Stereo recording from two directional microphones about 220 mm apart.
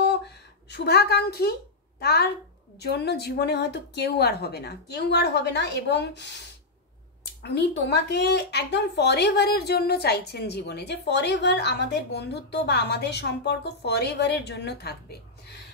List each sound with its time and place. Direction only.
0.7 s a woman's voice: 45° left (ahead or behind)
7.4 s speech: 50° left (ahead or behind)